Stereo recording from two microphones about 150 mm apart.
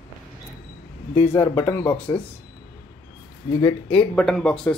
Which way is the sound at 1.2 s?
15° left (ahead or behind).